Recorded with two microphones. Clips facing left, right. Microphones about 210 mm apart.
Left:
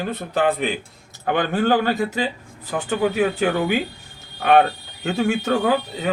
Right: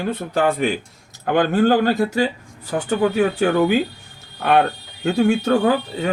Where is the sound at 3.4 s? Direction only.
40° right (ahead or behind).